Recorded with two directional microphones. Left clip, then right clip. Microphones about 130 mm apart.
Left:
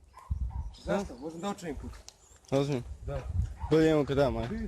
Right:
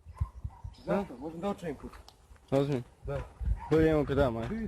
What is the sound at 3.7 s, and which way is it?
Speech, 35° left (ahead or behind).